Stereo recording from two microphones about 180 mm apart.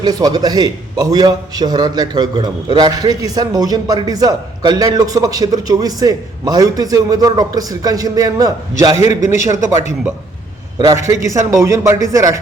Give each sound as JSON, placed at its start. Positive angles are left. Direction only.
{"t": 0.0, "sound": "a man's voice", "side_deg": -20}
{"t": 10.8, "sound": "a man's voice", "side_deg": -20}